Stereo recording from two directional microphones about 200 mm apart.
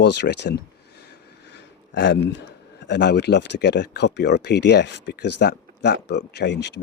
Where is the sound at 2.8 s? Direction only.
55° left (ahead or behind).